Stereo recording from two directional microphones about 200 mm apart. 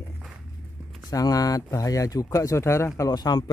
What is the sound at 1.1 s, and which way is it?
Speech, 15° left (ahead or behind).